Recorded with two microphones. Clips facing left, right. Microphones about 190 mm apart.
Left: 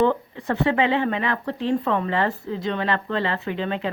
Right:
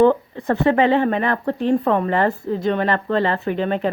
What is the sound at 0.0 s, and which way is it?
Speech, 45° right (ahead or behind).